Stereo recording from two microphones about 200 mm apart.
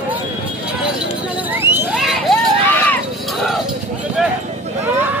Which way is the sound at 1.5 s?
10° right (ahead or behind).